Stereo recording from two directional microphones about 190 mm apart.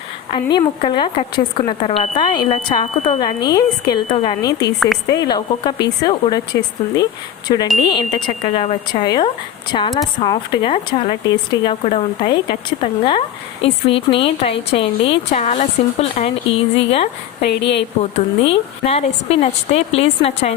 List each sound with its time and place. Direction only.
0.5 s a woman's voice: 25° left (ahead or behind)
2.8 s speech: 35° left (ahead or behind)
3.2 s a woman's voice: 20° left (ahead or behind)
17.4 s a woman's voice: 65° left (ahead or behind)
18.0 s speech: 30° left (ahead or behind)